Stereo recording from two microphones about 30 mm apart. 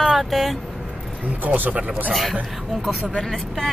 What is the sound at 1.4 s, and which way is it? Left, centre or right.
Speech, right.